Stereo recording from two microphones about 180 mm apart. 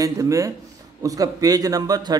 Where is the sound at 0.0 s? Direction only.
20° right (ahead or behind).